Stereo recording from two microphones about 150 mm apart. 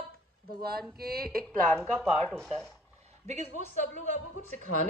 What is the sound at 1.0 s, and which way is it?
Speech, 90° right.